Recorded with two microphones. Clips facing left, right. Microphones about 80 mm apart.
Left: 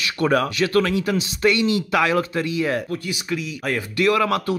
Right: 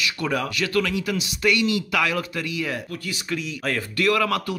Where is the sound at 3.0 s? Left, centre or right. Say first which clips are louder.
Left 2 dB; centre.